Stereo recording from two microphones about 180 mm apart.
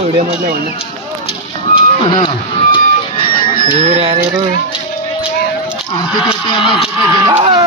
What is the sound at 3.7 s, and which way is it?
Speech, 35° right (ahead or behind).